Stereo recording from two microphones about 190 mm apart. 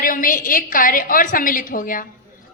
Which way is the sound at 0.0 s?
45° left (ahead or behind).